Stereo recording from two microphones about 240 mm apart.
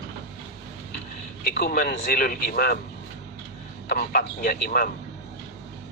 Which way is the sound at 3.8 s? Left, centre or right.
Left.